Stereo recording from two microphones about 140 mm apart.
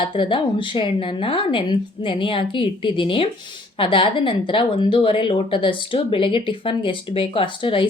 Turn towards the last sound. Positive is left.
turn(degrees=40)  # may be behind; listen again after turning